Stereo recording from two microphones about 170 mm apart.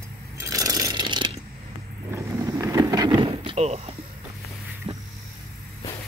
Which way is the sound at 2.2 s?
20° right (ahead or behind).